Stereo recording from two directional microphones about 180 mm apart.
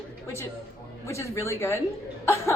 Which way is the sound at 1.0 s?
15° left (ahead or behind).